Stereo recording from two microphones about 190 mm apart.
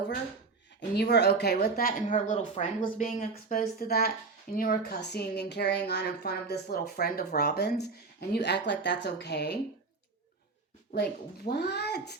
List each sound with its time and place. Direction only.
0.8 s speech: 60° left (ahead or behind)
2.2 s speech: 40° left (ahead or behind); by 9.6 s 60° left (ahead or behind)
10.9 s speech: 55° left (ahead or behind)